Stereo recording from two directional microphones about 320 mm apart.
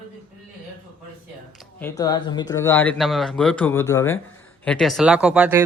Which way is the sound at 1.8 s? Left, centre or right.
Centre.